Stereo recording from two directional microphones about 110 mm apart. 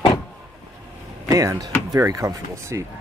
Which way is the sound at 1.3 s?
35° right (ahead or behind).